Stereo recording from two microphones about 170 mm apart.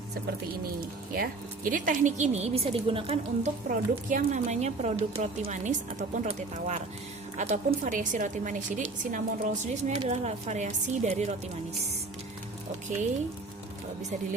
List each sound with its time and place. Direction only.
0.1 s speech: 70° right (ahead or behind)
1.1 s a woman's voice: 55° right (ahead or behind); by 3.5 s 35° right (ahead or behind)
3.7 s a woman's voice: 50° right (ahead or behind)